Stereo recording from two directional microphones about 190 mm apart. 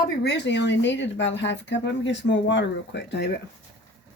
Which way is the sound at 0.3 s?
70° left (ahead or behind).